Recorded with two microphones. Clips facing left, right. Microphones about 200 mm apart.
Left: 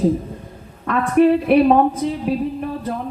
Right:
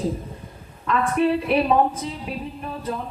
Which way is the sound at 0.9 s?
55° left (ahead or behind).